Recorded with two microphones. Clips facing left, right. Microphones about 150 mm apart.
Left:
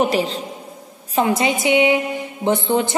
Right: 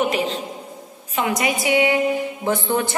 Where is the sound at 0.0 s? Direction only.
35° left (ahead or behind).